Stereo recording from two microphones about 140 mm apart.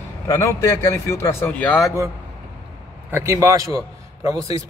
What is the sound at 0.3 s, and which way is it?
A man's voice, 20° left (ahead or behind).